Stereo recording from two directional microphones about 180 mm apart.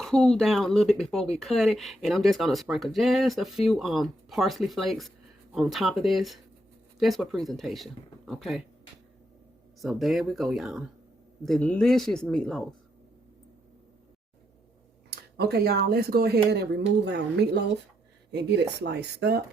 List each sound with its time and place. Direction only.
0.0 s speech: 5° left (ahead or behind)
9.8 s speech: centre (ahead or behind)
15.1 s speech: 60° right (ahead or behind)